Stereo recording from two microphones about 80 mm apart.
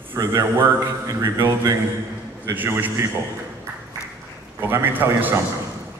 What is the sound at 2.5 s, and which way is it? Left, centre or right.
Speech, right.